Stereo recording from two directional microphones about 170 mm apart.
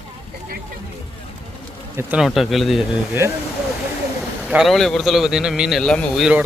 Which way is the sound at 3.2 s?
15° right (ahead or behind).